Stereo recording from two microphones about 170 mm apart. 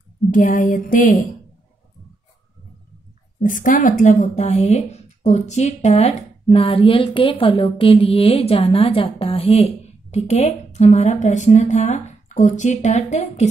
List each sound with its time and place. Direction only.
0.3 s a woman's voice: 50° left (ahead or behind)
3.3 s a woman's voice: 50° left (ahead or behind)